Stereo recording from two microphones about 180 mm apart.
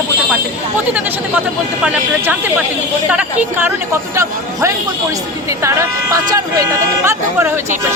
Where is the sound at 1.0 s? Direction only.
10° right (ahead or behind).